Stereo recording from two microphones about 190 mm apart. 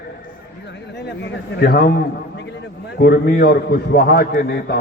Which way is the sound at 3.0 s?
55° left (ahead or behind).